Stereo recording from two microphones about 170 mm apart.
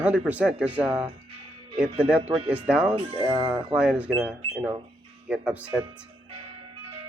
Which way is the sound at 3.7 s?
5° right (ahead or behind).